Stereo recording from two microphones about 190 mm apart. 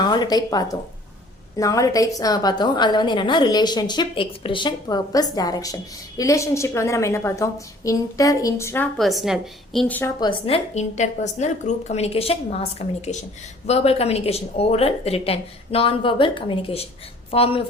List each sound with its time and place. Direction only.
0.0 s a woman's voice: 20° left (ahead or behind)
9.0 s a woman's voice: centre (ahead or behind)
10.2 s a woman's voice: 25° left (ahead or behind)